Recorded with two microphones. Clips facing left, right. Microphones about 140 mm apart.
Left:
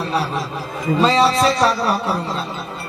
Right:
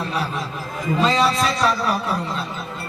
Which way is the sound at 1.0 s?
30° left (ahead or behind).